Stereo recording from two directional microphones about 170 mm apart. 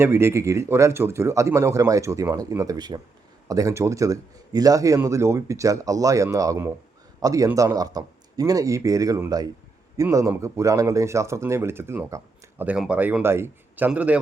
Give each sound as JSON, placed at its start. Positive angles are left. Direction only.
{"t": 0.0, "sound": "speech", "side_deg": -15}